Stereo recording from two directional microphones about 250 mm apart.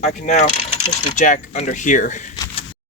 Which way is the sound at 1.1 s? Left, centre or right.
Left.